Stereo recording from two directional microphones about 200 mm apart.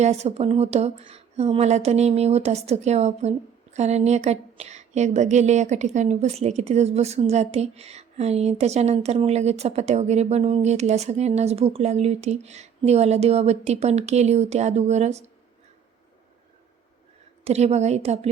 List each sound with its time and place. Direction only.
0.0 s speech: 35° right (ahead or behind)
17.4 s speech: 35° right (ahead or behind)